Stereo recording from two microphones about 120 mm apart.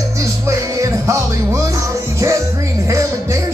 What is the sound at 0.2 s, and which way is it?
Music, 25° right (ahead or behind).